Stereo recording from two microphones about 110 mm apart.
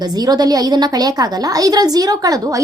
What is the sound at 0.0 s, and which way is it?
A woman's voice, 35° right (ahead or behind).